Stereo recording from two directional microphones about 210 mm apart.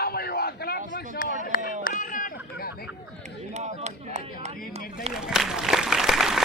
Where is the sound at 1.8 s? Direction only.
40° left (ahead or behind).